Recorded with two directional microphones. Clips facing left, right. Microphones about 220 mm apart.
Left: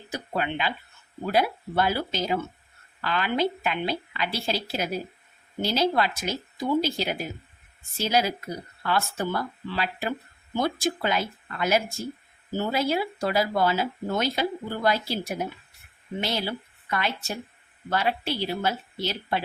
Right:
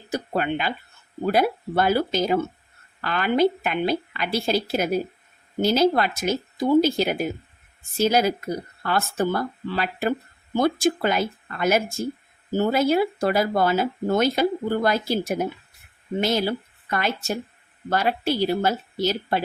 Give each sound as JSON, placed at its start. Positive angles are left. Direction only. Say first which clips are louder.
{"t": 0.1, "sound": "speech", "louder": "right 5 dB", "side_deg": -45}